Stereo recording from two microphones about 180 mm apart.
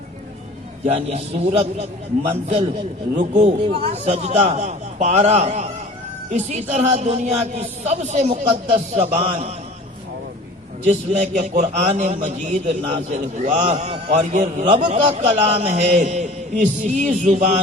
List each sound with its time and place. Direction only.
0.9 s a man's voice: 35° right (ahead or behind)
3.2 s a man's voice: 40° right (ahead or behind)
10.8 s a man's voice: 40° right (ahead or behind)